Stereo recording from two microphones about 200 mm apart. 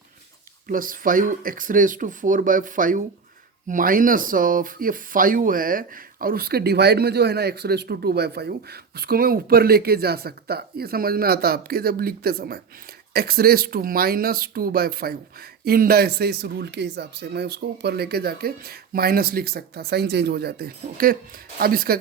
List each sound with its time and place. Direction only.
0.7 s speech: 45° right (ahead or behind)